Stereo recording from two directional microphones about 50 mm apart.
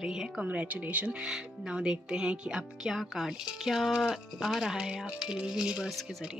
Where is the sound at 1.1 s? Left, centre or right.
Centre.